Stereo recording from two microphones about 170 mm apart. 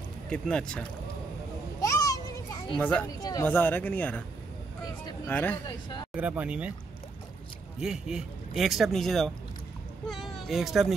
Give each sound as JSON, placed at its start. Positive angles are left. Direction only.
{"t": 0.3, "sound": "a man's voice", "side_deg": 5}
{"t": 1.8, "sound": "children playing", "side_deg": 20}
{"t": 2.8, "sound": "speech", "side_deg": 10}
{"t": 3.2, "sound": "speech", "side_deg": 25}
{"t": 3.4, "sound": "speech", "side_deg": 10}
{"t": 5.3, "sound": "speech", "side_deg": 10}
{"t": 5.7, "sound": "speech", "side_deg": 25}
{"t": 6.1, "sound": "speech", "side_deg": -10}
{"t": 7.8, "sound": "a man's voice", "side_deg": -5}